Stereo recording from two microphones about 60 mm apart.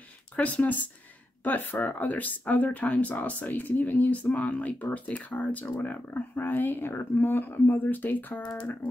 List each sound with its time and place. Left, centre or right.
0.4 s speech: left